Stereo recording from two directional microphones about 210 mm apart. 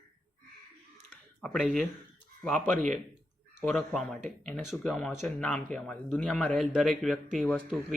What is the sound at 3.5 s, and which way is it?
Speech, centre (ahead or behind).